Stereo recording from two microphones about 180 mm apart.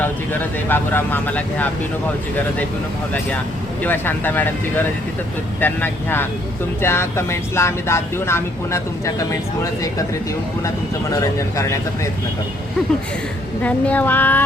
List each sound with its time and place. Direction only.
0.0 s speech: 10° left (ahead or behind)
3.8 s speech: 10° left (ahead or behind)
11.1 s speech: 20° left (ahead or behind)
13.6 s speech: 10° left (ahead or behind)